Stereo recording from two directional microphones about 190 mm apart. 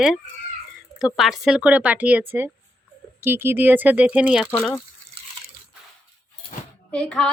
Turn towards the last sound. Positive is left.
turn(degrees=5)  # may be behind; listen again after turning